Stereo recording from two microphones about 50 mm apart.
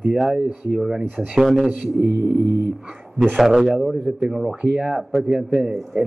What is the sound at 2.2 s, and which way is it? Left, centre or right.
Music, right.